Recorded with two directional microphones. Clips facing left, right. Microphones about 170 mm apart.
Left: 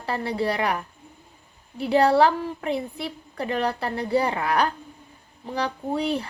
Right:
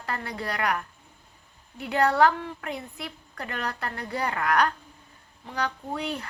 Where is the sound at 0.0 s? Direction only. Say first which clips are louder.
Left 7 dB; 30° left (ahead or behind).